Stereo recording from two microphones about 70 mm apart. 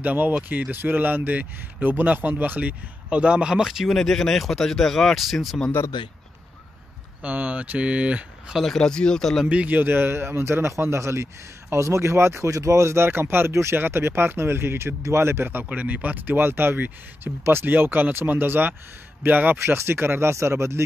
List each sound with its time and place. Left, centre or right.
0.0 s speech: right; by 3.9 s centre
3.9 s speech: centre
7.2 s speech: right
8.7 s speech: centre
9.5 s speech: right